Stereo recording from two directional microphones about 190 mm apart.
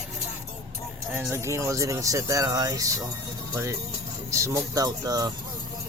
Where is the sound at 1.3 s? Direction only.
15° right (ahead or behind).